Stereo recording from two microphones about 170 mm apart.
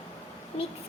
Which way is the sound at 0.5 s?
35° left (ahead or behind).